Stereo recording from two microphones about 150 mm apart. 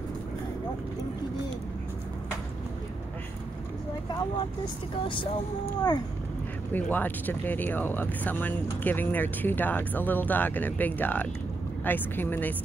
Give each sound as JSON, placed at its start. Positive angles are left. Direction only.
{"t": 5.0, "sound": "speech", "side_deg": 35}
{"t": 6.7, "sound": "speech", "side_deg": 10}